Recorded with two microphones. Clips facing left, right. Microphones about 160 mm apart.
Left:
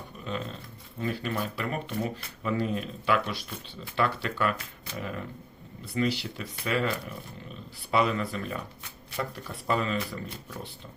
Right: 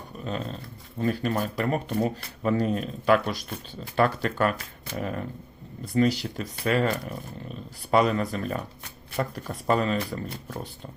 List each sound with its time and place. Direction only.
0.3 s speech: 40° right (ahead or behind)